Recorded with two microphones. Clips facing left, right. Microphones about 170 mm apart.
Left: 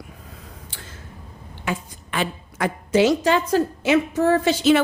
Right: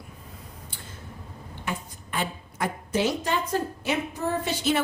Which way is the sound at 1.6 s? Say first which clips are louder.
Left 6 dB; 90° left.